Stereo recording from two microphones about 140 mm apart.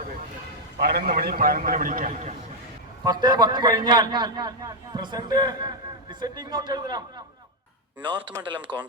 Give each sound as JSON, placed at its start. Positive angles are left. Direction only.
{"t": 1.0, "sound": "a man's voice", "side_deg": -90}
{"t": 3.0, "sound": "a man's voice", "side_deg": -30}
{"t": 8.0, "sound": "a man's voice", "side_deg": -35}
{"t": 8.7, "sound": "speech", "side_deg": -10}